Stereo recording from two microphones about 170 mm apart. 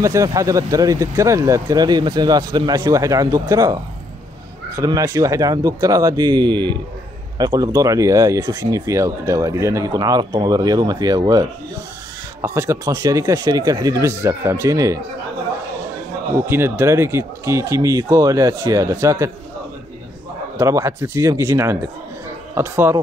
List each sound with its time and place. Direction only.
0.0 s speech: 20° right (ahead or behind)
16.3 s speech: 15° right (ahead or behind)
20.5 s speech: 15° right (ahead or behind)